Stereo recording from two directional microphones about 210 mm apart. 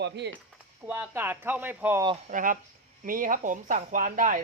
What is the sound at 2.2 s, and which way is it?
Speech, 40° right (ahead or behind).